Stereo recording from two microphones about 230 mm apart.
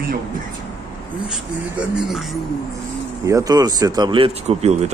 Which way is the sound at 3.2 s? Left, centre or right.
Centre.